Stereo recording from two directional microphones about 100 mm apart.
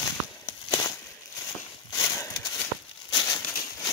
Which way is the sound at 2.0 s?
40° left (ahead or behind).